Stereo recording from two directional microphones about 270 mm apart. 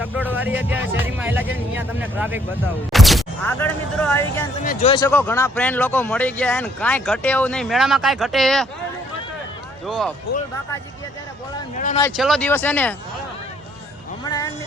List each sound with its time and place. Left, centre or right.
0.0 s speech: centre
4.6 s speech: left
4.9 s speech: centre
9.8 s speech: centre
12.1 s speech: centre
14.3 s speech: centre